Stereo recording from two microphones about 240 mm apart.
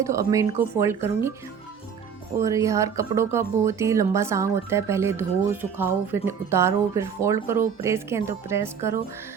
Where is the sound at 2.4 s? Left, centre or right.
Centre.